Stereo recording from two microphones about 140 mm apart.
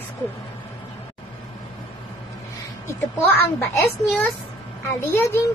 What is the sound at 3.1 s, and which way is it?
A child's voice, 20° left (ahead or behind).